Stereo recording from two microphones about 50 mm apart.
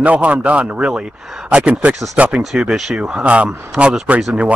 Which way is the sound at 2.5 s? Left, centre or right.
Centre.